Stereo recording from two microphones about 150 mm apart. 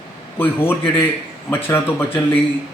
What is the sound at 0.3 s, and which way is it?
A man's voice, 15° left (ahead or behind).